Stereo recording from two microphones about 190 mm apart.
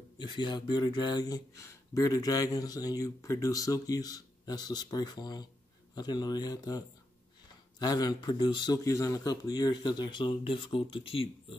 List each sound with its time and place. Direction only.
0.2 s speech: 25° left (ahead or behind)
7.8 s speech: 20° left (ahead or behind)